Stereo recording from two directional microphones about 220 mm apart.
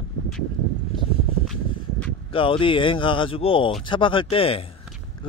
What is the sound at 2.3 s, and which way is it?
Speech, 25° left (ahead or behind).